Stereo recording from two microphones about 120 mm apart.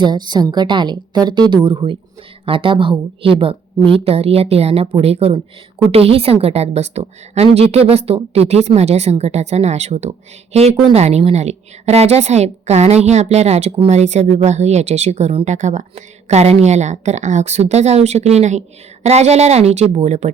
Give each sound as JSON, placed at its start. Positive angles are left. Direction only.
{"t": 0.0, "sound": "a woman's voice", "side_deg": -40}
{"t": 15.4, "sound": "a woman's voice", "side_deg": -80}